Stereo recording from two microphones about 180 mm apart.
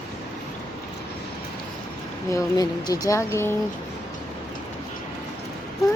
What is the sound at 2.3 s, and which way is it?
A woman's voice, 20° left (ahead or behind).